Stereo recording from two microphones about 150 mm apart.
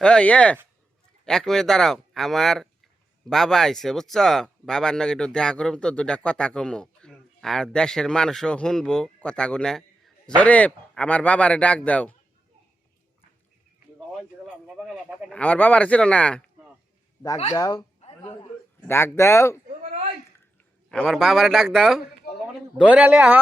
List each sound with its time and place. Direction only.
0.0 s speech: 5° left (ahead or behind)
14.2 s speech: centre (ahead or behind)
17.5 s speech: 25° left (ahead or behind)
18.0 s a sound: 45° left (ahead or behind)
18.4 s speech: 15° left (ahead or behind)
19.6 s a sound: 65° right (ahead or behind)
20.9 s a man's voice: centre (ahead or behind)